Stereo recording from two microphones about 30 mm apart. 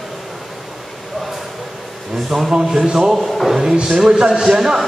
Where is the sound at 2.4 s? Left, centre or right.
Right.